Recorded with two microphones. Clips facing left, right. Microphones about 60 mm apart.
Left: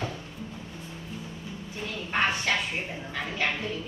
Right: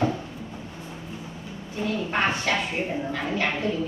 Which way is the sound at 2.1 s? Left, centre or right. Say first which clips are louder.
Even; right.